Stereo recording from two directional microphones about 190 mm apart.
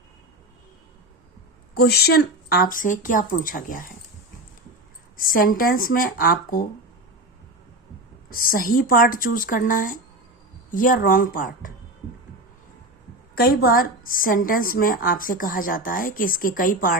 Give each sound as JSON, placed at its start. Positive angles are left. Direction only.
{"t": 1.7, "sound": "a woman's voice", "side_deg": 55}
{"t": 5.1, "sound": "a woman's voice", "side_deg": 45}
{"t": 8.3, "sound": "a woman's voice", "side_deg": 50}
{"t": 13.3, "sound": "a woman's voice", "side_deg": 55}